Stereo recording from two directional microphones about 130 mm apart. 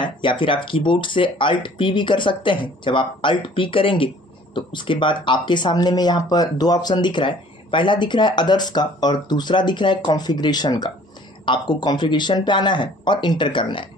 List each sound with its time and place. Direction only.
0.0 s speech: 40° left (ahead or behind)